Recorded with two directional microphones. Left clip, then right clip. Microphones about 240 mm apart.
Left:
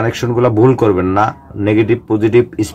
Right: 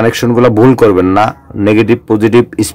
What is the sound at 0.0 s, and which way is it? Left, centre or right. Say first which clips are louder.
A man's voice: right 5 dB; right.